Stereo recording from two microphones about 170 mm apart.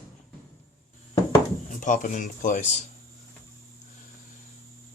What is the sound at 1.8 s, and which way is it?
Speech, 50° left (ahead or behind).